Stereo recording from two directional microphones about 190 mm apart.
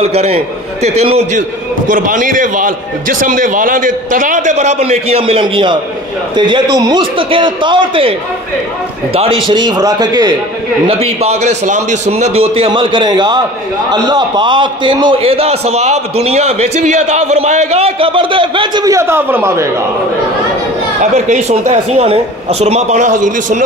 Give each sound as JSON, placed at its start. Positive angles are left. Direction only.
{"t": 0.0, "sound": "a man's voice", "side_deg": -35}
{"t": 9.1, "sound": "a man's voice", "side_deg": -30}
{"t": 10.9, "sound": "a man's voice", "side_deg": -35}
{"t": 21.0, "sound": "a man's voice", "side_deg": -40}